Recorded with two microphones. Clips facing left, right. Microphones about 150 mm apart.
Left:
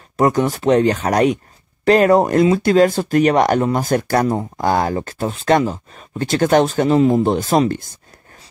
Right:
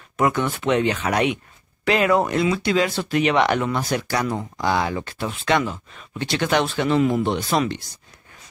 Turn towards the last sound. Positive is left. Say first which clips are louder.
# left 6 dB
turn(degrees=45)  # may be behind; listen again after turning